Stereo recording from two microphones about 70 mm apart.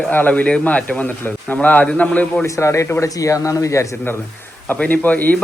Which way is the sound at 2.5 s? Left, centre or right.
Left.